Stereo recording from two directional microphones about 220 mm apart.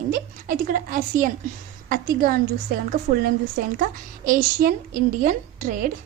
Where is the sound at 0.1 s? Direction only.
40° right (ahead or behind).